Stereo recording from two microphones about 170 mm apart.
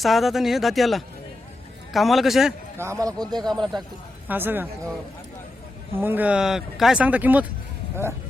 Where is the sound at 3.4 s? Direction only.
Centre (ahead or behind).